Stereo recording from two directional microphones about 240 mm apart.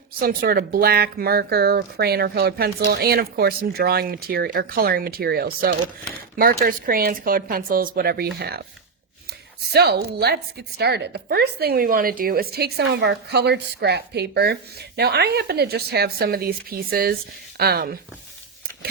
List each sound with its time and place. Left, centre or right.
0.2 s speech: right
9.7 s a woman's voice: right